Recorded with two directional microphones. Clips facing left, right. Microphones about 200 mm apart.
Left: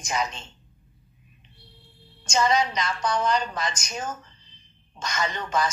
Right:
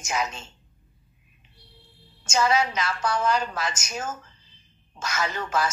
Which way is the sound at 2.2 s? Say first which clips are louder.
Even; 5° right (ahead or behind).